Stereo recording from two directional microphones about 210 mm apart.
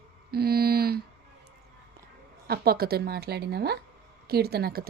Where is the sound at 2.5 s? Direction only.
45° right (ahead or behind).